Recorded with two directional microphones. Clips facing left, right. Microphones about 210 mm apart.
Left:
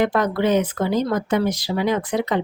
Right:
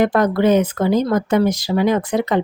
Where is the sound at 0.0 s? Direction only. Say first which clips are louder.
Right 4 dB; 45° right (ahead or behind).